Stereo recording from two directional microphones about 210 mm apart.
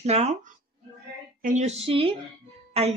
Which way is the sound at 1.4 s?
35° right (ahead or behind).